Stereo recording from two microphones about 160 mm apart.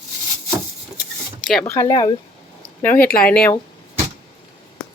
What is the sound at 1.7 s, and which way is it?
Speech, 20° left (ahead or behind).